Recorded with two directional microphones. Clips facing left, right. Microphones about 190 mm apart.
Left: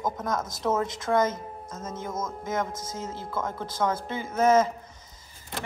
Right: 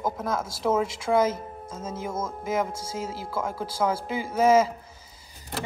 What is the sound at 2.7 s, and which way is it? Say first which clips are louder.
Speech: right 1 dB; 30° right (ahead or behind).